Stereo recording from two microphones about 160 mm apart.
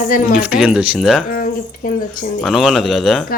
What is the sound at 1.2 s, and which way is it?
A woman's voice, 65° left (ahead or behind).